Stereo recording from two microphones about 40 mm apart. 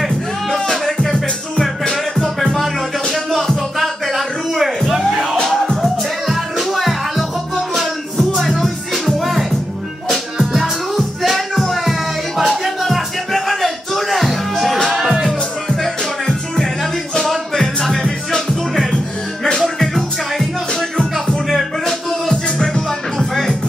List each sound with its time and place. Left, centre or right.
0.5 s music: centre
2.2 s music: centre
3.7 s a sound: centre
5.1 s music: centre
14.9 s music: centre
15.7 s music: centre
19.6 s music: centre
20.9 s music: centre
21.5 s music: centre